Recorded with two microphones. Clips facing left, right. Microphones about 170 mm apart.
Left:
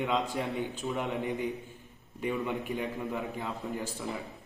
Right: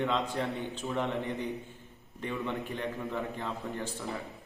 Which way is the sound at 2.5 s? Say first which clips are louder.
Left 2 dB; 15° left (ahead or behind).